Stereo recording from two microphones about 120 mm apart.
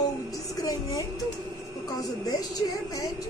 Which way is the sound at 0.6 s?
30° left (ahead or behind).